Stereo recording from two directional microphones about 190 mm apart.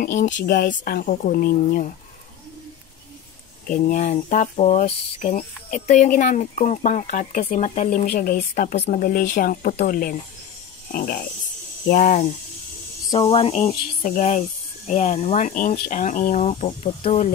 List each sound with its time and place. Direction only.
0.0 s speech: 40° left (ahead or behind)
3.6 s speech: 45° left (ahead or behind)
13.1 s speech: 30° left (ahead or behind)